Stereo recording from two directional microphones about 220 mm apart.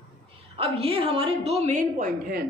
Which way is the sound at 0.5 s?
25° right (ahead or behind).